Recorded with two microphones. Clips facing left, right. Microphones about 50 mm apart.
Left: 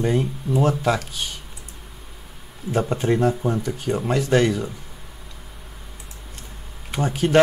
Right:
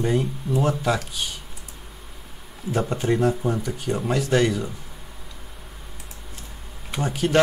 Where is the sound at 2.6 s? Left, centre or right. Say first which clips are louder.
Left 2 dB; centre.